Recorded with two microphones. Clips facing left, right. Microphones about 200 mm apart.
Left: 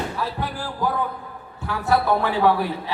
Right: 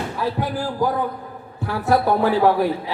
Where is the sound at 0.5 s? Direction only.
40° right (ahead or behind).